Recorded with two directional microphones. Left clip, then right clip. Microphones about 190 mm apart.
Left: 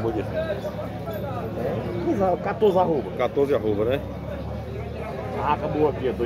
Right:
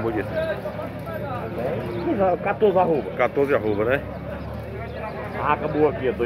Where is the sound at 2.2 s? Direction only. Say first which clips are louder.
Right 2 dB; 25° right (ahead or behind).